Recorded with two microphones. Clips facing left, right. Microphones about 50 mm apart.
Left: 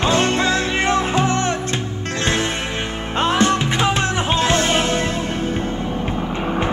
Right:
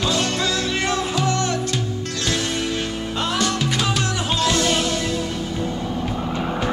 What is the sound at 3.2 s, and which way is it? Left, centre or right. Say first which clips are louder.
Music: left 6 dB; left.